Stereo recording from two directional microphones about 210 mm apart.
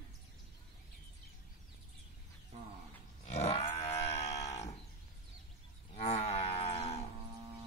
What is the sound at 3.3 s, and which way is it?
Grunt, 30° left (ahead or behind).